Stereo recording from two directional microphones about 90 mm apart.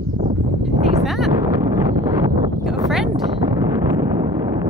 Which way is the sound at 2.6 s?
Centre (ahead or behind).